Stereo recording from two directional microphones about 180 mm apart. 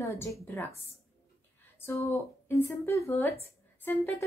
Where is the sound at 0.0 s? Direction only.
15° left (ahead or behind).